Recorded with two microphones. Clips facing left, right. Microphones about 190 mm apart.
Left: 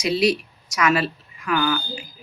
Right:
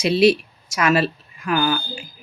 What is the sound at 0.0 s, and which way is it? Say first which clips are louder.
Speech: right 4 dB; 25° right (ahead or behind).